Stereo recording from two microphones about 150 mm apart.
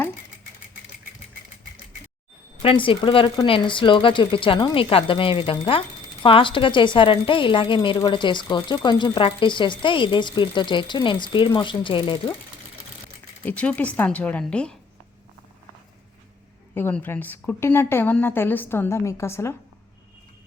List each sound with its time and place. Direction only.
2.6 s a woman's voice: 35° left (ahead or behind)
13.4 s a woman's voice: 10° left (ahead or behind)
16.7 s a woman's voice: 15° left (ahead or behind)